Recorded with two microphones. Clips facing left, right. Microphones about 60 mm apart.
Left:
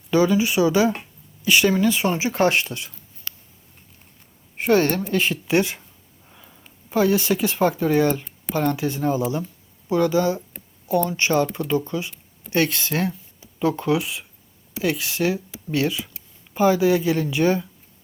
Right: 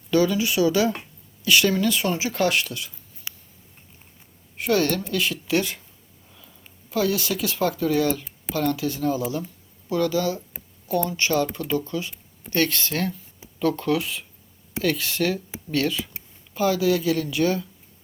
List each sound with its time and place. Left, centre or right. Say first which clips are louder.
0.1 s speech: left 2 dB; centre
3.3 s a sound: even; centre
4.5 s speech: left 3 dB; left